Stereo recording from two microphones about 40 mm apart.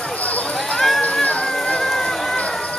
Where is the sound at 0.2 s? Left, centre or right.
Left.